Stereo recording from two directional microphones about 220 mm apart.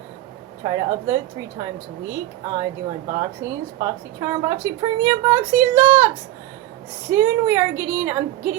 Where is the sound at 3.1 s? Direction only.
15° right (ahead or behind).